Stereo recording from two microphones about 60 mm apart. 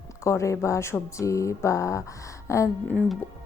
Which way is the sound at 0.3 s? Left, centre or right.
Left.